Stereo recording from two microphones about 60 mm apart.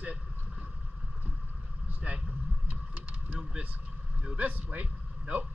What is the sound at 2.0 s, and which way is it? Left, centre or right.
Vehicle, right.